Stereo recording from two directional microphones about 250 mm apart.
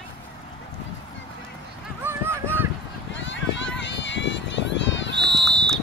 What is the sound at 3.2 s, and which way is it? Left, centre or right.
Run, left.